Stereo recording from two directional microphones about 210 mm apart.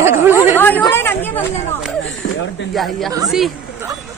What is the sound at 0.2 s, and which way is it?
Chatter, 10° right (ahead or behind).